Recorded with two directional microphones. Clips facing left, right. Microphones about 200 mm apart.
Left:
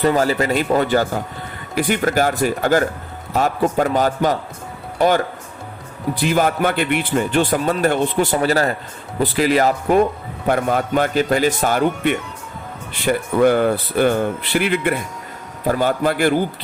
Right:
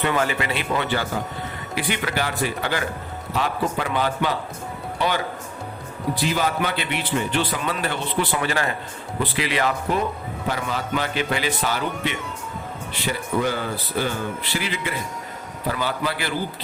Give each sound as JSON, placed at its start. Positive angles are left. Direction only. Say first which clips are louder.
{"t": 0.0, "sound": "a man's voice", "louder": "left 6 dB", "side_deg": 35}
{"t": 6.2, "sound": "a man's voice", "louder": "left 7 dB", "side_deg": 50}